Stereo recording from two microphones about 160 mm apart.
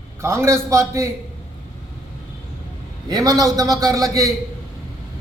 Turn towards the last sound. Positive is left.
turn(degrees=-20)  # may be behind; listen again after turning